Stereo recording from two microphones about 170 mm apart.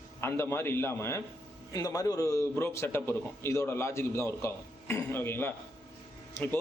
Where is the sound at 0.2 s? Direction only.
15° left (ahead or behind).